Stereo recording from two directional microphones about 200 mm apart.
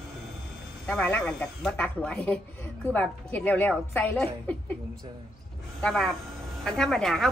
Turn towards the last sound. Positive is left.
turn(degrees=0)  # may be behind; listen again after turning